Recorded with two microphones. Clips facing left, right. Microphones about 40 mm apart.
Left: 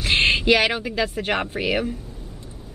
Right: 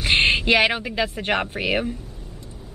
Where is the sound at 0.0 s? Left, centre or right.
Centre.